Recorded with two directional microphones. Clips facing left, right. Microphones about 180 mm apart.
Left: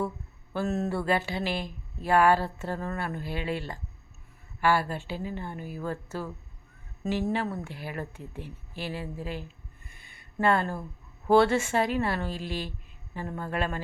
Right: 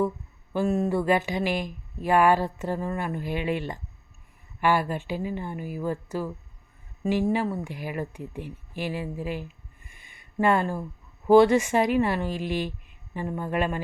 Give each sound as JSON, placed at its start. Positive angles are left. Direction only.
{"t": 0.5, "sound": "speech", "side_deg": -10}